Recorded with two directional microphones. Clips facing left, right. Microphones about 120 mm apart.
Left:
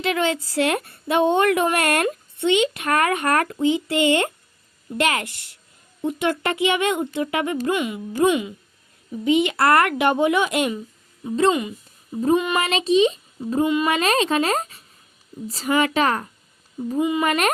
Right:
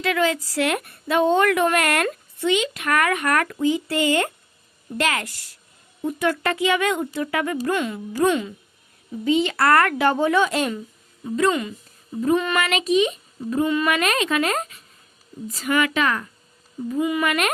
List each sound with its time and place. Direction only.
0.0 s a woman's voice: 25° left (ahead or behind)
17.0 s a woman's voice: 25° left (ahead or behind)
17.2 s speech: 35° left (ahead or behind)